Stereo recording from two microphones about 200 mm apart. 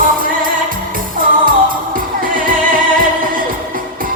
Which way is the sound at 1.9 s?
45° right (ahead or behind).